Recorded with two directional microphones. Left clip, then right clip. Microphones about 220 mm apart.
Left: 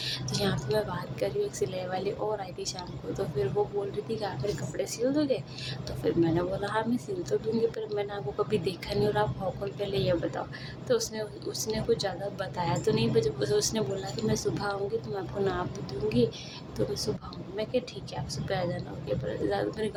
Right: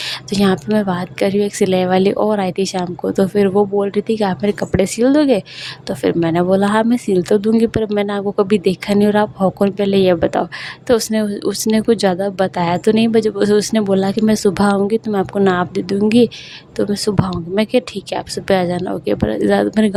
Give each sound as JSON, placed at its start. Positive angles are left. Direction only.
{"t": 0.3, "sound": "a woman's voice", "side_deg": -45}